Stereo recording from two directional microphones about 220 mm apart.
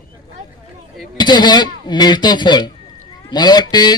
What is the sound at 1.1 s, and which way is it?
Speech, 20° left (ahead or behind).